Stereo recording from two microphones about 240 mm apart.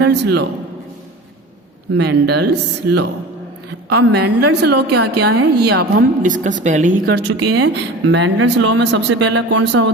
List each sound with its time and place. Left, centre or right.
0.0 s a woman's voice: right
2.0 s a woman's voice: right